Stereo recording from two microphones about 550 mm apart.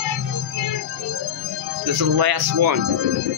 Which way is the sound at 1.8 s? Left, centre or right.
Right.